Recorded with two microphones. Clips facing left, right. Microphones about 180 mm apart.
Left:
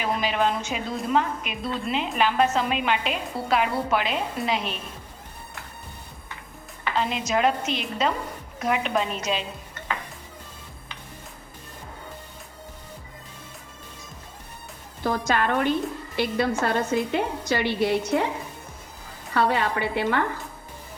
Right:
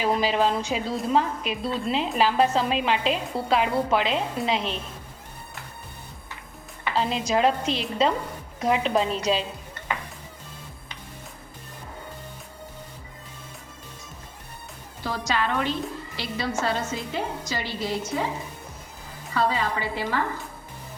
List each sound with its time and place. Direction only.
0.0 s a woman's voice: 30° right (ahead or behind)
6.9 s a woman's voice: 30° right (ahead or behind)
15.0 s a woman's voice: 50° left (ahead or behind)
19.3 s a woman's voice: 65° left (ahead or behind)